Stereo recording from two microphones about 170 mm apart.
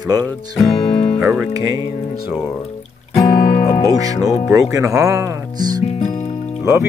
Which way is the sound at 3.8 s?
20° right (ahead or behind).